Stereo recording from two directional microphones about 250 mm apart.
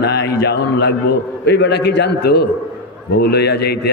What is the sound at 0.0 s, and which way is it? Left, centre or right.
A man's voice, left.